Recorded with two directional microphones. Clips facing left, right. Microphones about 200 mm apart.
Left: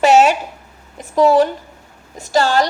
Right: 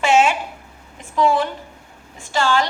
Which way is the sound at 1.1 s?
40° left (ahead or behind).